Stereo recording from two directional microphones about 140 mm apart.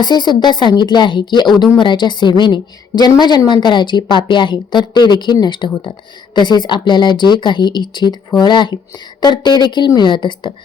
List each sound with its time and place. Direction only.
0.0 s a woman's voice: 30° left (ahead or behind)